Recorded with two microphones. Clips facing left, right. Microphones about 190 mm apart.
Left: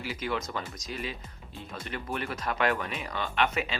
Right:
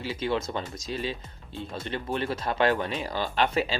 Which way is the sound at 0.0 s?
25° right (ahead or behind).